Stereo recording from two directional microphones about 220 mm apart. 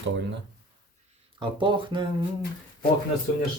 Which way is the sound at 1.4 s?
20° right (ahead or behind).